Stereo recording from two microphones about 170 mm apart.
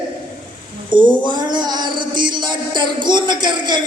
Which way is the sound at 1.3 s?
25° right (ahead or behind).